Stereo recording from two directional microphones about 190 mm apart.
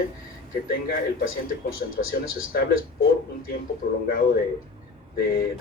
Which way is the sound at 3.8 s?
55° left (ahead or behind).